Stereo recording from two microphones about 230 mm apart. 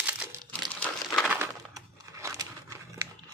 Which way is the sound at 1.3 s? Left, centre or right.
Centre.